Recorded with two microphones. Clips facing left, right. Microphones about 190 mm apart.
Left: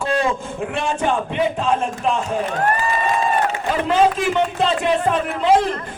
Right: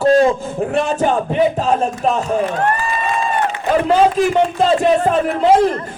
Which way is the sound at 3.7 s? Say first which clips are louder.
Right 4 dB; 40° right (ahead or behind).